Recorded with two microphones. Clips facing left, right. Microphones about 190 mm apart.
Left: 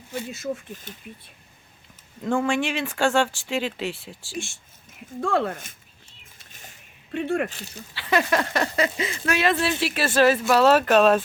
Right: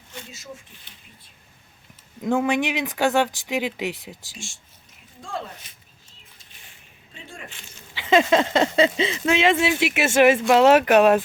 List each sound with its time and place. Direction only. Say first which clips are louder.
0.3 s speech: left 11 dB; 55° left (ahead or behind)
2.2 s speech: right 2 dB; 15° right (ahead or behind)
5.2 s speech: left 10 dB; 65° left (ahead or behind)
6.5 s a sound: left 7 dB; 45° left (ahead or behind)
7.1 s speech: left 17 dB; 65° left (ahead or behind)
7.5 s speech: left 8 dB; 40° left (ahead or behind)
7.9 s a sound: right 5 dB; 20° right (ahead or behind)
10.5 s speech: right 3 dB; 15° right (ahead or behind)